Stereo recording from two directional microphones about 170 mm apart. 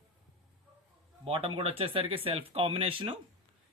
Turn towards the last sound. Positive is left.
turn(degrees=-35)  # may be behind; listen again after turning